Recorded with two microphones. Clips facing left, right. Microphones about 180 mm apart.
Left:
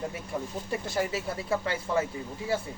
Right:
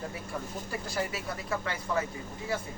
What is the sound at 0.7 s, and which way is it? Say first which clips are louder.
Speech: left 4 dB; 25° left (ahead or behind).